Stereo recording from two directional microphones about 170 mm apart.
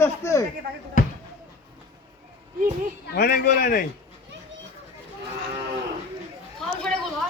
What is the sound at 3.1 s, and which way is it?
Speech, 65° left (ahead or behind).